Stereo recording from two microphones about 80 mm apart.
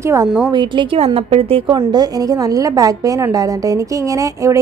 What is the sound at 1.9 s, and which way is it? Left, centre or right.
A woman's voice, right.